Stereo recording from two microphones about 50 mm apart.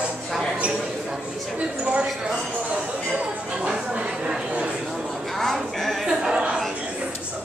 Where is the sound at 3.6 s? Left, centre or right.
Centre.